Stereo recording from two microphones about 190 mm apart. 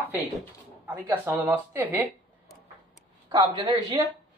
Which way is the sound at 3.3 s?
20° right (ahead or behind).